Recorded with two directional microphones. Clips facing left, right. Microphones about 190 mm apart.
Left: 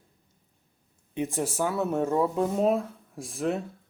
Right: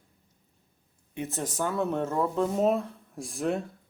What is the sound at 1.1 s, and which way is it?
Speech, 15° left (ahead or behind).